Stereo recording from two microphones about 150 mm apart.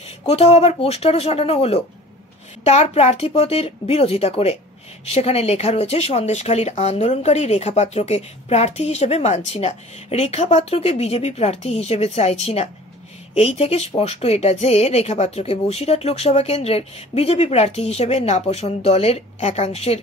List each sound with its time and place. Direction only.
0.3 s speech: 45° left (ahead or behind)